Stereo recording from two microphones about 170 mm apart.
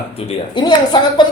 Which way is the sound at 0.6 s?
25° left (ahead or behind).